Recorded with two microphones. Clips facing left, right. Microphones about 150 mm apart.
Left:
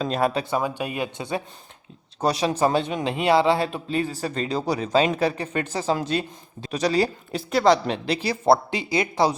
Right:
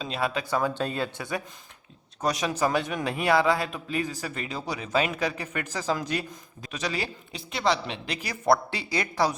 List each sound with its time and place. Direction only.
0.0 s speech: 45° left (ahead or behind)
0.5 s speech: 15° left (ahead or behind)
2.2 s a man's voice: 30° left (ahead or behind)